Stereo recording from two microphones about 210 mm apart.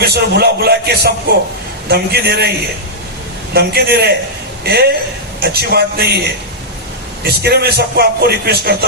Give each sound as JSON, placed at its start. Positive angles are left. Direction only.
{"t": 0.0, "sound": "speech", "side_deg": -50}
{"t": 3.5, "sound": "speech", "side_deg": -50}
{"t": 7.3, "sound": "speech", "side_deg": -50}